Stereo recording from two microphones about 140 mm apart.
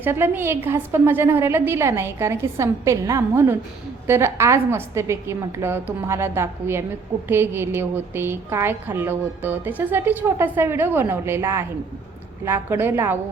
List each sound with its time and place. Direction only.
0.0 s a woman's voice: 15° right (ahead or behind)